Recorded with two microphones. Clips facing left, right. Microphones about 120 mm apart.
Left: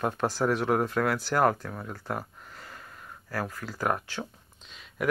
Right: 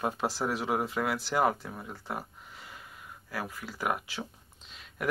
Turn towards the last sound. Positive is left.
turn(degrees=0)  # may be behind; listen again after turning